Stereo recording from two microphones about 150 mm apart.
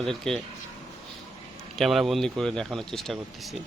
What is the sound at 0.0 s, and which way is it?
Speech, centre (ahead or behind).